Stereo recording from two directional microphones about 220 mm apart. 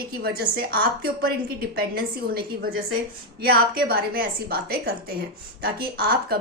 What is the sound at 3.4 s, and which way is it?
A woman's voice, 45° right (ahead or behind).